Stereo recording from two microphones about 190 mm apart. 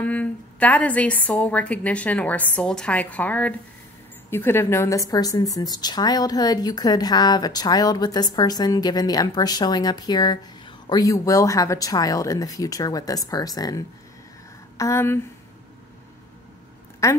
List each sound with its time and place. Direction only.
0.0 s a woman's voice: 5° left (ahead or behind)